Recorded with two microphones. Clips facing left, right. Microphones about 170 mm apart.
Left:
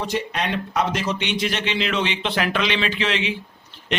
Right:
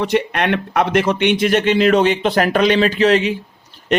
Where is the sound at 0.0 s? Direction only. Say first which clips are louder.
Right 7 dB; 65° right (ahead or behind).